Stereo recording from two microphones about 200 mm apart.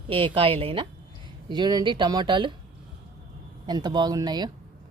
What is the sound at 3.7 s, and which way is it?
Speech, 20° right (ahead or behind).